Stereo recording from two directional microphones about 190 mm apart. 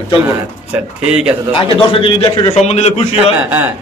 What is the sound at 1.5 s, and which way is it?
A man's voice, 25° left (ahead or behind).